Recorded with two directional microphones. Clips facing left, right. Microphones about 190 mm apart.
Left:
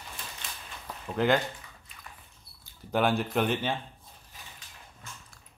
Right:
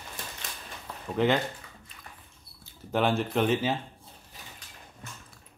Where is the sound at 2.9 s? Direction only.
Centre (ahead or behind).